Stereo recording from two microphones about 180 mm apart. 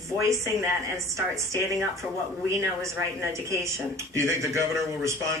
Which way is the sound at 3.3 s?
15° right (ahead or behind).